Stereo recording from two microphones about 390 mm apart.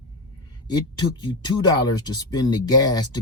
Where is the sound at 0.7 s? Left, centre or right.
Centre.